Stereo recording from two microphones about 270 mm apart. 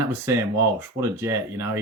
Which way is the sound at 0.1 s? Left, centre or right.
Centre.